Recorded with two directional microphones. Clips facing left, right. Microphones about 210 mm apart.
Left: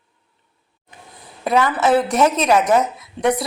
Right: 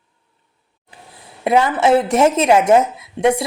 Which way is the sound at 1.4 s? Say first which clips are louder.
Right 3 dB; 25° right (ahead or behind).